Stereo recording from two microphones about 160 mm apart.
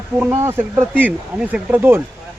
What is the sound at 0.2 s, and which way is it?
A man's voice, 15° right (ahead or behind).